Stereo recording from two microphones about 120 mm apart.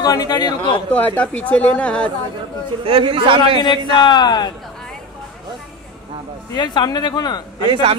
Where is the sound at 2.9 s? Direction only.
45° right (ahead or behind).